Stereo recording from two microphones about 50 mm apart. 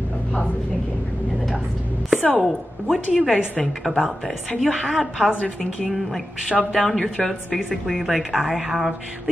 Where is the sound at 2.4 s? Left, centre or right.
Centre.